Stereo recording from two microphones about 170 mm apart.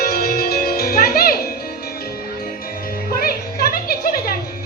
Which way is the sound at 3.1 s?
60° left (ahead or behind).